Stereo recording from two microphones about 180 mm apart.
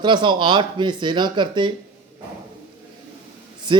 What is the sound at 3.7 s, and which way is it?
Speech, 25° right (ahead or behind).